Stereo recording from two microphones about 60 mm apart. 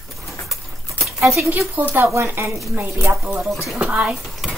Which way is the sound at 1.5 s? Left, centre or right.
Right.